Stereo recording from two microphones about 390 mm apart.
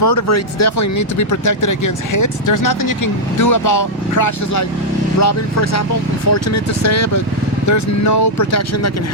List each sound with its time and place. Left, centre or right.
0.0 s speech: left